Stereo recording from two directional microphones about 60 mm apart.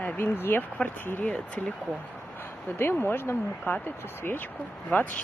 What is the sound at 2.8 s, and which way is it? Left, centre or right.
Speech, left.